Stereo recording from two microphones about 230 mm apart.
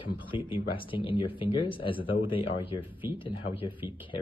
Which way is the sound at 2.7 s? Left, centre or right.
Centre.